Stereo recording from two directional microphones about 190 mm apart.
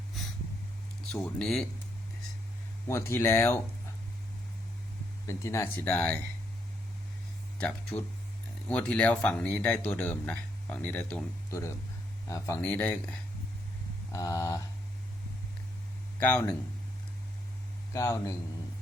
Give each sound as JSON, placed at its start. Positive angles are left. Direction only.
{"t": 1.1, "sound": "speech", "side_deg": 5}
{"t": 2.8, "sound": "speech", "side_deg": 15}
{"t": 5.2, "sound": "speech", "side_deg": 15}
{"t": 7.6, "sound": "speech", "side_deg": 5}
{"t": 16.2, "sound": "speech", "side_deg": 10}
{"t": 17.9, "sound": "speech", "side_deg": 15}